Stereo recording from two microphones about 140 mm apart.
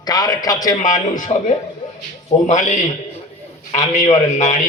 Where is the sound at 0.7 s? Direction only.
65° left (ahead or behind).